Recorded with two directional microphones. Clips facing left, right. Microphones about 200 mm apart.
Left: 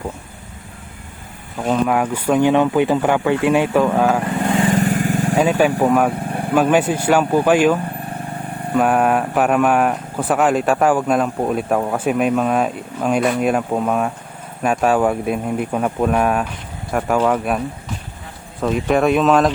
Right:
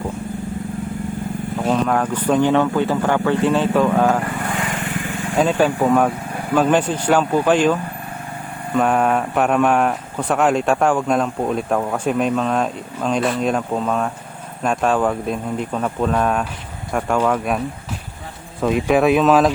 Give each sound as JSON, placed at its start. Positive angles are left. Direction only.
{"t": 1.6, "sound": "speech", "side_deg": 5}
{"t": 4.4, "sound": "vehicle", "side_deg": 30}
{"t": 5.4, "sound": "speech", "side_deg": 5}
{"t": 18.6, "sound": "speech", "side_deg": 0}